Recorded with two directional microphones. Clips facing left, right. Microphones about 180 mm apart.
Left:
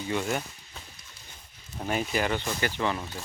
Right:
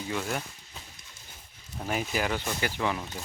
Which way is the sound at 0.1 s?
Centre (ahead or behind).